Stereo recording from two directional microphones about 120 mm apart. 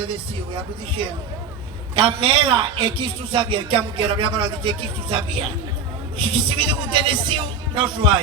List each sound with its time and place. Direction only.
0.0 s speech: 45° right (ahead or behind)